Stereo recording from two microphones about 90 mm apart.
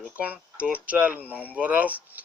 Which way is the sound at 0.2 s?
15° right (ahead or behind).